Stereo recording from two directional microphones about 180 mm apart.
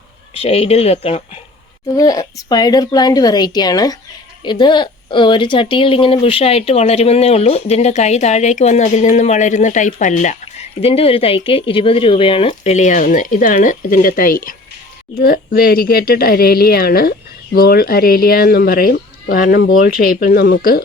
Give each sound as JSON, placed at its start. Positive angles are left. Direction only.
{"t": 0.3, "sound": "speech", "side_deg": 35}
{"t": 1.9, "sound": "a woman's voice", "side_deg": 20}